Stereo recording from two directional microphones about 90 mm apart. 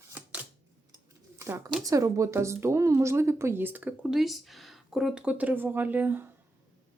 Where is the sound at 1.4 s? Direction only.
35° right (ahead or behind).